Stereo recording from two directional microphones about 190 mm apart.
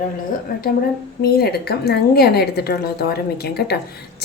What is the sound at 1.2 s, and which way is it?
A woman's voice, 55° left (ahead or behind).